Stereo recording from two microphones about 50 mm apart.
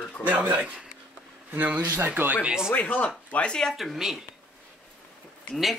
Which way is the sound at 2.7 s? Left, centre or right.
Left.